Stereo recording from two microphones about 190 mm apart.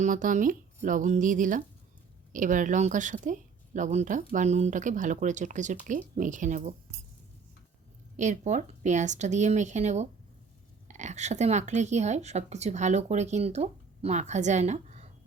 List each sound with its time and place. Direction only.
0.0 s speech: 45° right (ahead or behind)
8.1 s speech: 40° right (ahead or behind)